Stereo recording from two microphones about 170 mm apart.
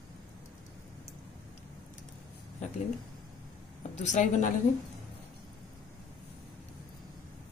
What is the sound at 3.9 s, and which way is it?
Speech, 45° left (ahead or behind).